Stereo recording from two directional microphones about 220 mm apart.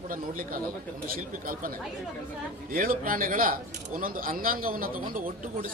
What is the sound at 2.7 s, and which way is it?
Speech, 40° right (ahead or behind).